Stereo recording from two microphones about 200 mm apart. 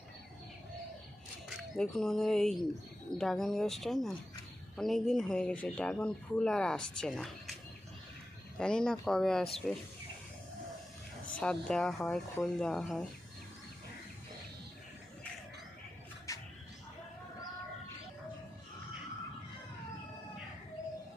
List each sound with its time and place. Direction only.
1.5 s speech: centre (ahead or behind)
8.5 s speech: 5° left (ahead or behind)
11.3 s speech: 5° left (ahead or behind)
16.3 s music: 15° left (ahead or behind)